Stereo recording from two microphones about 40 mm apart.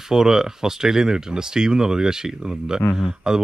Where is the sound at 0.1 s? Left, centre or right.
Centre.